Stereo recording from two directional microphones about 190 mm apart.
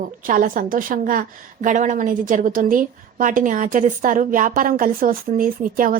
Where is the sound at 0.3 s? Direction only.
45° right (ahead or behind).